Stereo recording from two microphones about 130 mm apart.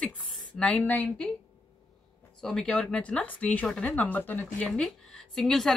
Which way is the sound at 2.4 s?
5° left (ahead or behind).